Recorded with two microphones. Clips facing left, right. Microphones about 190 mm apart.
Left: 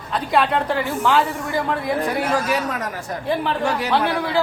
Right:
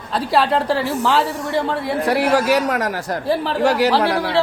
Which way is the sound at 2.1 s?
80° right.